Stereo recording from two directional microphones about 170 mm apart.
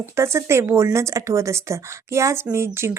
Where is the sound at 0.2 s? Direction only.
15° right (ahead or behind).